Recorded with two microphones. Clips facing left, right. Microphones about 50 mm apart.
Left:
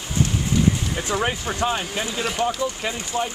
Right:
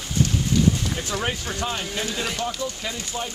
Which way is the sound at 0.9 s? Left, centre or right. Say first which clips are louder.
Left 3 dB; left.